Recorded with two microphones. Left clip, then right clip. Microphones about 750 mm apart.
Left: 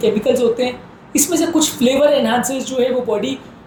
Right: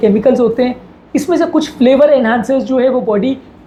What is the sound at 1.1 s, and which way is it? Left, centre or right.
A woman's voice, right.